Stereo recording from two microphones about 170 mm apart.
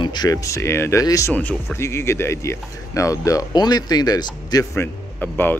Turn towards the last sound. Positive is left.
turn(degrees=10)  # may be behind; listen again after turning